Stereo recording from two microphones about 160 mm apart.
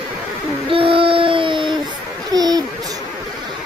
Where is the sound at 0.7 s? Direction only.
35° right (ahead or behind).